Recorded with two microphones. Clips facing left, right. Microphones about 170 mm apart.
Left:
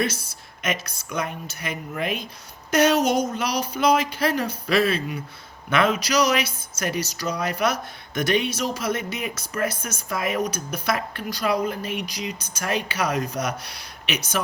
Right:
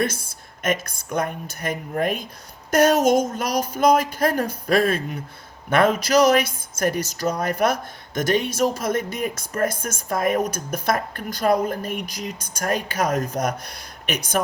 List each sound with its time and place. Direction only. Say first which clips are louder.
0.0 s speech: right 1 dB; 50° right (ahead or behind)